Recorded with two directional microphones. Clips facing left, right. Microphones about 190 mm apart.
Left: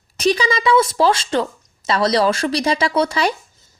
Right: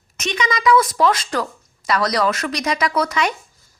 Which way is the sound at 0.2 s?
30° left (ahead or behind).